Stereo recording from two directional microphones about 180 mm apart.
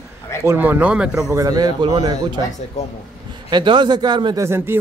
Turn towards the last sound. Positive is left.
turn(degrees=-15)  # may be behind; listen again after turning